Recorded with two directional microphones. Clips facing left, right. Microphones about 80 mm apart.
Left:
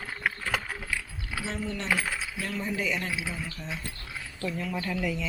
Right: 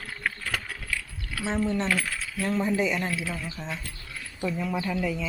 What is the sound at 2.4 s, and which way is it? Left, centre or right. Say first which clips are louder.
Mechanisms: right 7 dB; right.